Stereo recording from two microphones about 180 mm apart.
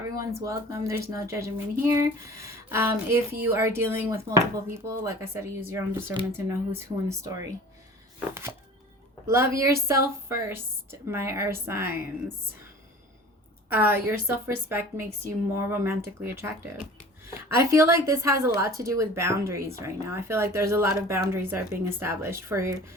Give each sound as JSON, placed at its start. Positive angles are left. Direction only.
{"t": 0.4, "sound": "a woman's voice", "side_deg": -15}
{"t": 9.2, "sound": "a woman's voice", "side_deg": -15}
{"t": 13.7, "sound": "a woman's voice", "side_deg": -10}